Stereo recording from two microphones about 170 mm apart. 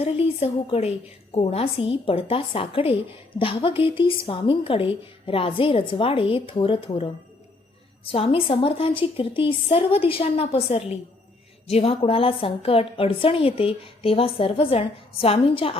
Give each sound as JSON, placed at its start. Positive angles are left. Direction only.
{"t": 0.0, "sound": "a woman's voice", "side_deg": 40}